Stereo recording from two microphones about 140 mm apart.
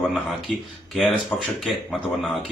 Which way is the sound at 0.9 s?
5° left (ahead or behind).